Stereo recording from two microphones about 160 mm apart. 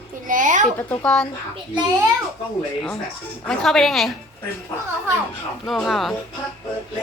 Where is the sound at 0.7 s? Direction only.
10° left (ahead or behind).